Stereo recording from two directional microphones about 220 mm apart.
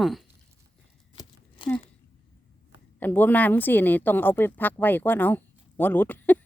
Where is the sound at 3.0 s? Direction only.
10° left (ahead or behind).